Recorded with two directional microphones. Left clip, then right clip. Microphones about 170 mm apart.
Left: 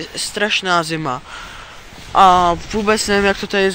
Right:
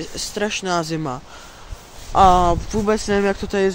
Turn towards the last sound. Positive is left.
turn(degrees=-10)  # may be behind; listen again after turning